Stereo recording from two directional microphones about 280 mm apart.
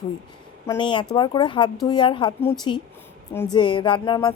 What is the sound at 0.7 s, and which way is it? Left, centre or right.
Speech, centre.